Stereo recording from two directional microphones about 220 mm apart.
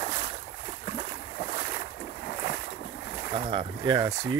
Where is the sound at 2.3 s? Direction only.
40° left (ahead or behind).